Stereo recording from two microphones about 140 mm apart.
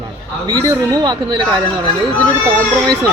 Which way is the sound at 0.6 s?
25° right (ahead or behind).